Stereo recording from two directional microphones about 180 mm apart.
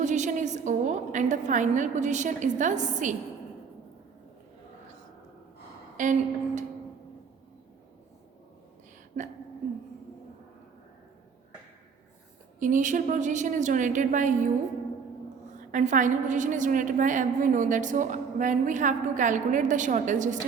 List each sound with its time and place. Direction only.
0.0 s a woman's voice: 40° right (ahead or behind)
6.0 s a woman's voice: 45° right (ahead or behind)
12.5 s a woman's voice: 45° right (ahead or behind)
15.7 s a woman's voice: 45° right (ahead or behind)